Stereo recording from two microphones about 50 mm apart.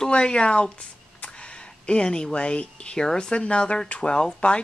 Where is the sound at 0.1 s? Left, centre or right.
Left.